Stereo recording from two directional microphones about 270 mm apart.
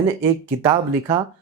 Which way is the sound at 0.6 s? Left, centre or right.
Centre.